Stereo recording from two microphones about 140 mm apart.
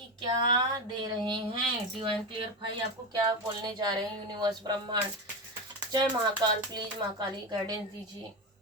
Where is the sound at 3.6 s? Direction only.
30° right (ahead or behind).